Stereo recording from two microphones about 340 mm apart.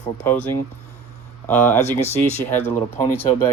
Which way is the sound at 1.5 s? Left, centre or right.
Centre.